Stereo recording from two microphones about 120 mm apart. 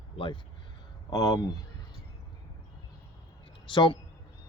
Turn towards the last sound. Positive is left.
turn(degrees=45)  # may be behind; listen again after turning